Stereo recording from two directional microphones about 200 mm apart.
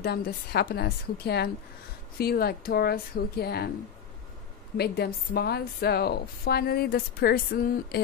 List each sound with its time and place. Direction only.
0.0 s a woman's voice: 50° left (ahead or behind)
4.7 s a woman's voice: 55° left (ahead or behind)